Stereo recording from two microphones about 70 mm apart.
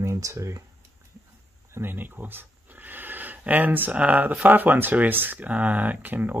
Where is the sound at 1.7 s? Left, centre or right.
Right.